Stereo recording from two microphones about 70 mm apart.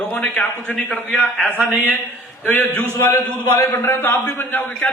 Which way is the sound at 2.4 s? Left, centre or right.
Left.